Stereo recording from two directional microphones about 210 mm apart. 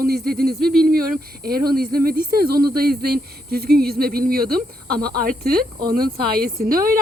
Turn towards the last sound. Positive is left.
turn(degrees=-45)  # may be behind; listen again after turning